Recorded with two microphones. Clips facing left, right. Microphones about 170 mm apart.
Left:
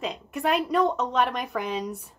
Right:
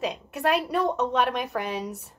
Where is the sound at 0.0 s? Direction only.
65° right (ahead or behind).